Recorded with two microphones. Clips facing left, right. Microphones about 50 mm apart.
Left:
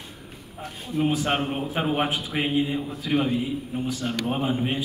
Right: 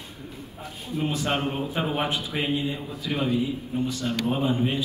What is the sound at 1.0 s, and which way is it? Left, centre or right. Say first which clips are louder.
Speech: left 2 dB; left.